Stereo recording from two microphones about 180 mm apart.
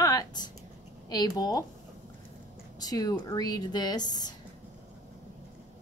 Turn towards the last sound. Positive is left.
turn(degrees=20)  # may be behind; listen again after turning